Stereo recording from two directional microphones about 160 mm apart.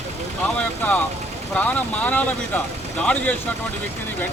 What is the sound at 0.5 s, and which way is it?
Speech, 10° left (ahead or behind).